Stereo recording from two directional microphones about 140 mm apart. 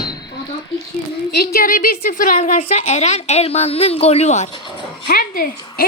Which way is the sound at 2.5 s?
50° left (ahead or behind).